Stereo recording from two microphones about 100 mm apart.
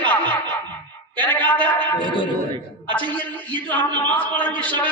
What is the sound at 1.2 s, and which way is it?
Speech, 15° left (ahead or behind).